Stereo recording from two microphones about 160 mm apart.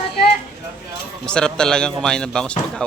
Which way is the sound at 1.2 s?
5° left (ahead or behind).